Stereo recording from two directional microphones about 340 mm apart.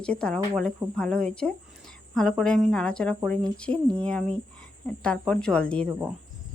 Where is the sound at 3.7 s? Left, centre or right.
Centre.